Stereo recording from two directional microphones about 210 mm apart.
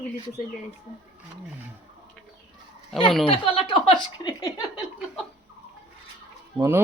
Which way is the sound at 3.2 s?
25° left (ahead or behind).